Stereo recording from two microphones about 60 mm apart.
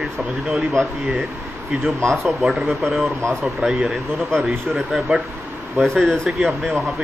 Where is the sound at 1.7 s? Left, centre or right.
Centre.